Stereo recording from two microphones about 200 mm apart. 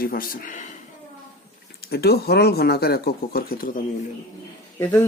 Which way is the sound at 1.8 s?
55° left (ahead or behind).